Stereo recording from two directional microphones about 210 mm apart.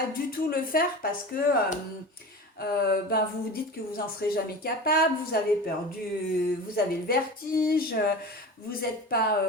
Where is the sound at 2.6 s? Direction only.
50° left (ahead or behind).